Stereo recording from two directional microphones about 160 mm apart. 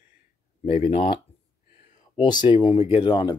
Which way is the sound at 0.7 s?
35° left (ahead or behind).